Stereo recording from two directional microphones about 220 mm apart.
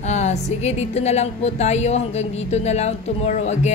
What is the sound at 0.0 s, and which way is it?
A woman's voice, 30° left (ahead or behind).